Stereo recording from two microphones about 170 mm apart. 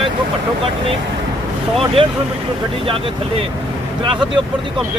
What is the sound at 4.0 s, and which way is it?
Speech, 30° right (ahead or behind).